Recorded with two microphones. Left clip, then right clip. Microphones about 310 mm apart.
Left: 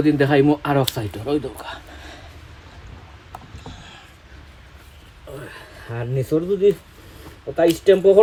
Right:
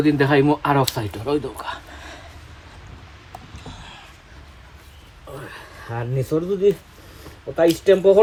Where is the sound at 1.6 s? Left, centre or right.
Centre.